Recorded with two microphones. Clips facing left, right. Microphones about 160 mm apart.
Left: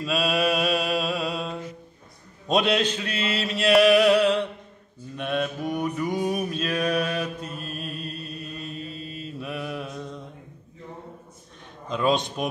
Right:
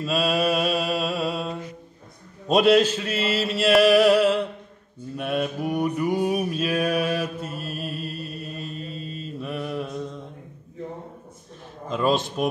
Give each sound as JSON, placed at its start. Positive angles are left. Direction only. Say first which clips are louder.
{"t": 0.0, "sound": "mantra", "louder": "right 1 dB", "side_deg": 0}
{"t": 11.9, "sound": "mantra", "louder": "right 1 dB", "side_deg": 0}